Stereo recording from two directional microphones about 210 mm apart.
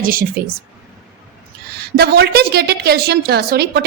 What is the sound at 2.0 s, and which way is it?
A woman's voice, 50° right (ahead or behind).